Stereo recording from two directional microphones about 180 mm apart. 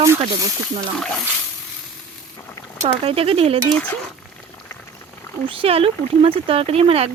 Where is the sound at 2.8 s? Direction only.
30° right (ahead or behind).